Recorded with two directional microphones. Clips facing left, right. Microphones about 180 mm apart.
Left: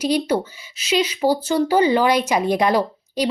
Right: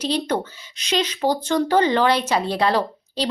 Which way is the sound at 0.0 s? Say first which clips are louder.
Left 3 dB; 10° left (ahead or behind).